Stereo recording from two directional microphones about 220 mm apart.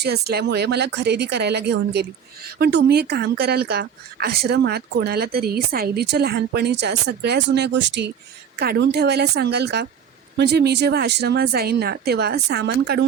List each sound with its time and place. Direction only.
0.0 s speech: 45° right (ahead or behind)